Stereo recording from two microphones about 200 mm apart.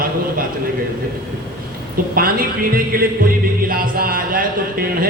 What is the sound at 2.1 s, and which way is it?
Speech, 45° right (ahead or behind).